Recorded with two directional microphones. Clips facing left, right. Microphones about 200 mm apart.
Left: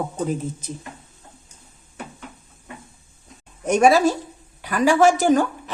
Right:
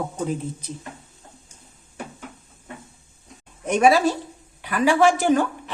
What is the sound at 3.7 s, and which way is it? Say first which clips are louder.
A woman's voice: left 2 dB; 45° left (ahead or behind).